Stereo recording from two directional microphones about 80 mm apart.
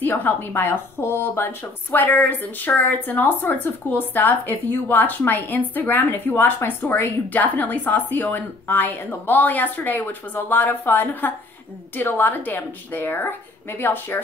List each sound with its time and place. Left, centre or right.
0.0 s speech: left